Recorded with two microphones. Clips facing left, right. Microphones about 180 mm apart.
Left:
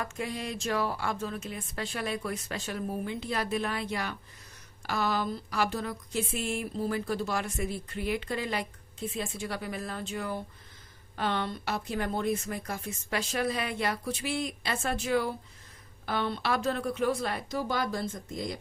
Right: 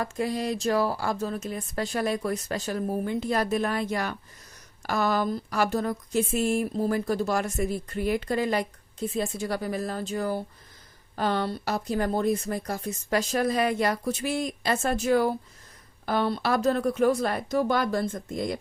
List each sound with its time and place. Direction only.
0.0 s speech: 35° right (ahead or behind); by 18.6 s 55° right (ahead or behind)